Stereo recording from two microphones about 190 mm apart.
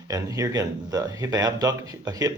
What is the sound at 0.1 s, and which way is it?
Speech, 20° right (ahead or behind).